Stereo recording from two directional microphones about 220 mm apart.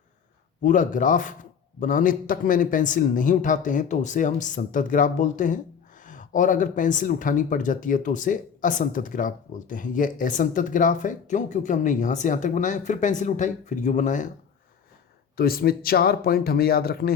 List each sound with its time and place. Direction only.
0.6 s speech: 35° left (ahead or behind)
15.4 s speech: 45° left (ahead or behind)